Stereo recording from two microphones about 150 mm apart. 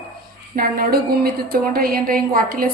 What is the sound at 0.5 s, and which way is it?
A woman's voice, 80° right.